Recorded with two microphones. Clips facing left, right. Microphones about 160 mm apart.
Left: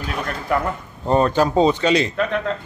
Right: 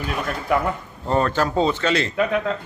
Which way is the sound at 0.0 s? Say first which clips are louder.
Right 1 dB; centre (ahead or behind).